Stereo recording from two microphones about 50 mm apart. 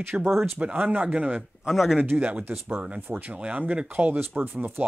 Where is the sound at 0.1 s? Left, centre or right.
Right.